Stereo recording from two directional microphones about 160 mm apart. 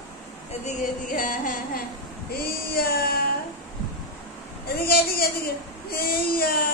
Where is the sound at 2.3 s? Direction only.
75° left (ahead or behind).